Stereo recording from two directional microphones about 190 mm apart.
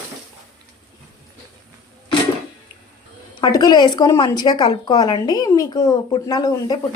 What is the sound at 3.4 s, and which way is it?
A woman's voice, 20° left (ahead or behind).